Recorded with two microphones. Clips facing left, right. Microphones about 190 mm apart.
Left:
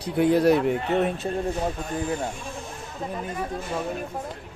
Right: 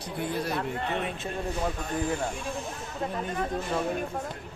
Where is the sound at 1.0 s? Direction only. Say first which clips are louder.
Left 6 dB; 35° left (ahead or behind).